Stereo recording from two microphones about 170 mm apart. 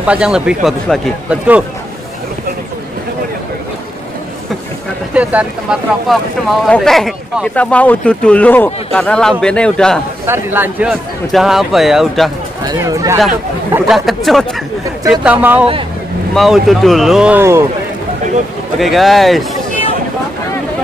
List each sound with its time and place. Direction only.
0.0 s speech: 5° right (ahead or behind)
5.1 s speech: 10° right (ahead or behind)
10.2 s speech: 15° right (ahead or behind)
12.6 s speech: 20° right (ahead or behind)
13.8 s speech: centre (ahead or behind)
18.8 s speech: centre (ahead or behind)